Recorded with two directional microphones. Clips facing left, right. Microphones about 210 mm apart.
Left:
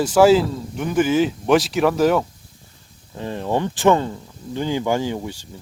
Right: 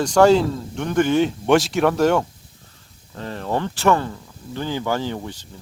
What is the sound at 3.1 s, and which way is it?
Speech, 15° left (ahead or behind).